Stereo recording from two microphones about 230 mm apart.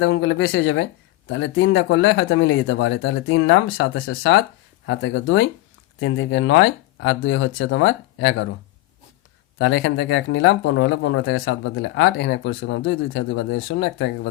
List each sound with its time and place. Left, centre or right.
0.0 s speech: left
9.6 s speech: left